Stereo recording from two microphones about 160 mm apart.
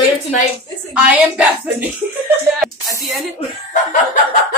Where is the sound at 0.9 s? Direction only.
10° right (ahead or behind).